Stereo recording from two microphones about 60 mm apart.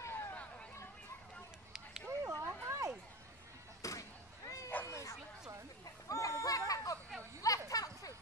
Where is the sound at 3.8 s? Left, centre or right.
Left.